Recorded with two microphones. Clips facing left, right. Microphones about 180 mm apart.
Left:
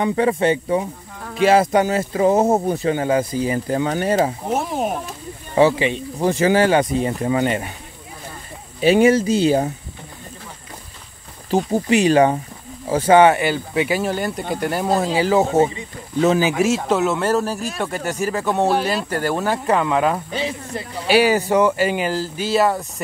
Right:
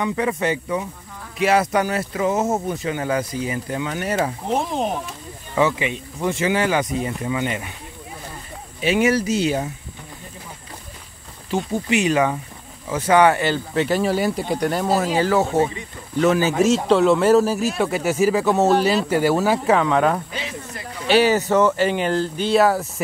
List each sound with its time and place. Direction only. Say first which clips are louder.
0.0 s speech: left 4 dB; 30° left (ahead or behind)
4.5 s speech: left 1 dB; 5° left (ahead or behind)
5.5 s speech: left 5 dB; 30° left (ahead or behind)
8.8 s speech: left 5 dB; 35° left (ahead or behind)
11.5 s speech: left 4 dB; 35° left (ahead or behind); by 14.0 s 10° left (ahead or behind)
14.0 s speech: right 2 dB; 5° right (ahead or behind)
15.1 s speech: left 4 dB; 15° left (ahead or behind)
16.6 s speech: right 3 dB; 5° left (ahead or behind)
20.3 s snake: left 6 dB; 30° left (ahead or behind)
21.1 s speech: left 1 dB; 10° left (ahead or behind)